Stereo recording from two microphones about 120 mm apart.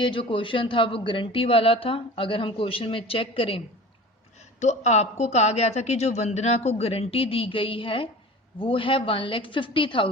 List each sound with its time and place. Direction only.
0.0 s a man's voice: 40° left (ahead or behind)
4.6 s a man's voice: 75° left (ahead or behind); by 10.1 s 45° left (ahead or behind)